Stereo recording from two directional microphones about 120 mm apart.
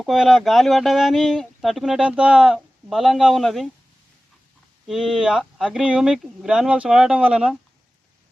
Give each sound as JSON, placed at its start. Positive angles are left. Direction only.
{"t": 0.0, "sound": "speech", "side_deg": 0}
{"t": 4.9, "sound": "speech", "side_deg": -5}